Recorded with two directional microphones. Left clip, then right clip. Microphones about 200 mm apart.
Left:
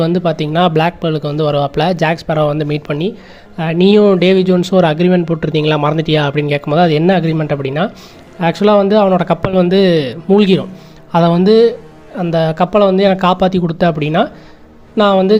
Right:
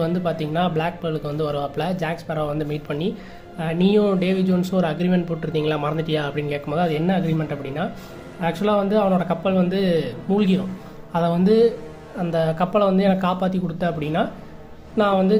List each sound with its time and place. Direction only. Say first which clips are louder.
0.0 s a man's voice: left 9 dB; 35° left (ahead or behind)